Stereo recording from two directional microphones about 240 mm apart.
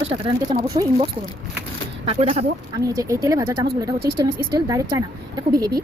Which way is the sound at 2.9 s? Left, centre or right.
Centre.